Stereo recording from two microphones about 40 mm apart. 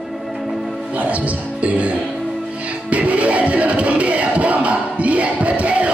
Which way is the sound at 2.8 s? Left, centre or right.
Right.